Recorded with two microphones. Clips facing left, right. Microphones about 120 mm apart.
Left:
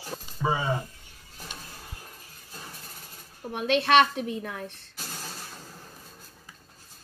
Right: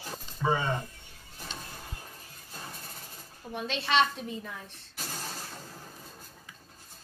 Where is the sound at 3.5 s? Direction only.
60° left (ahead or behind).